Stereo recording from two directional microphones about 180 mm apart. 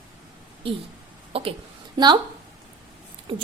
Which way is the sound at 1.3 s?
30° right (ahead or behind).